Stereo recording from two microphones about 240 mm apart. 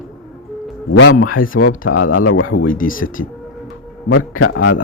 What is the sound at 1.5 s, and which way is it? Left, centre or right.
Speech, left.